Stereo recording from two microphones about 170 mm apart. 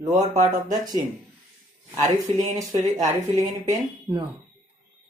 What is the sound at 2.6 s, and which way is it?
Speech, 20° right (ahead or behind).